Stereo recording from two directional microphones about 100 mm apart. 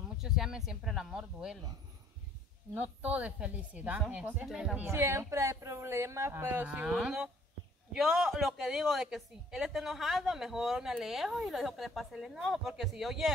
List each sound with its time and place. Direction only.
0.2 s a woman's voice: 5° right (ahead or behind)
2.7 s a woman's voice: 15° right (ahead or behind)
4.5 s a woman's voice: 5° right (ahead or behind)
4.8 s a woman's voice: 25° right (ahead or behind); by 13.3 s 5° right (ahead or behind)